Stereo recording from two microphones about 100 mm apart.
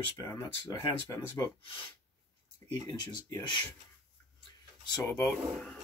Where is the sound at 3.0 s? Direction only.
45° left (ahead or behind).